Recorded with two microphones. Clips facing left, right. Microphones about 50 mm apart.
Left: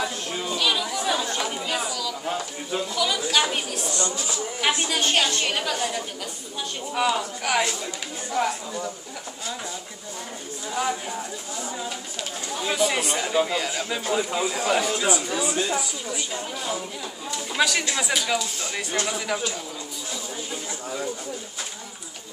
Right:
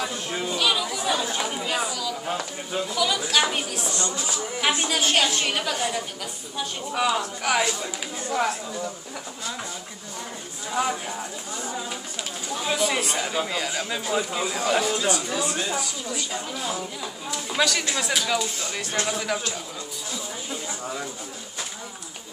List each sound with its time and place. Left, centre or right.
0.0 s chatter: centre
2.7 s a woman's voice: centre
3.9 s speech: right
4.6 s a woman's voice: centre
7.6 s speech: centre
10.7 s speech: centre
12.5 s a woman's voice: centre
15.0 s a woman's voice: centre
16.3 s a woman's voice: centre